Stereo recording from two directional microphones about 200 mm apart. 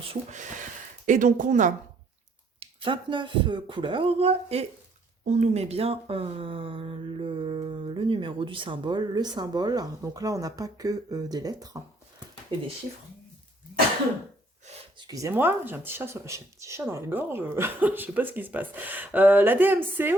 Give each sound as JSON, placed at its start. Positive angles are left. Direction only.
{"t": 0.1, "sound": "speech", "side_deg": -35}
{"t": 2.6, "sound": "speech", "side_deg": -25}
{"t": 14.9, "sound": "speech", "side_deg": -20}